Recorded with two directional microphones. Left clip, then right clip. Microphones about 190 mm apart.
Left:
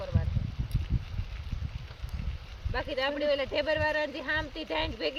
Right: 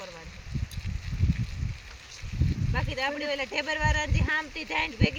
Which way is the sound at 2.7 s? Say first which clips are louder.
Even; 20° right (ahead or behind).